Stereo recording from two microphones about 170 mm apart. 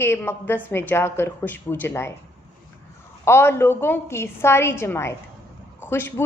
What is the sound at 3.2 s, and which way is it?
A woman's voice, 15° left (ahead or behind).